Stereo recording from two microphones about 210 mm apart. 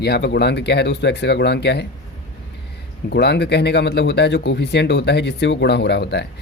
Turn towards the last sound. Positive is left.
turn(degrees=55)  # may be behind; listen again after turning